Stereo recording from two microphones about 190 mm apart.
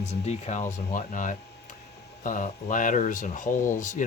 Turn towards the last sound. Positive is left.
turn(degrees=40)  # may be behind; listen again after turning